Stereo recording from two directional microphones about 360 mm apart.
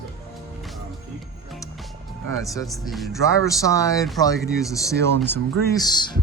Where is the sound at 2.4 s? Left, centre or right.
Centre.